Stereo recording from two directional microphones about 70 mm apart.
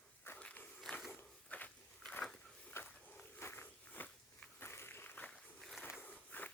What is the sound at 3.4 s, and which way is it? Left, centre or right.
Walk, left.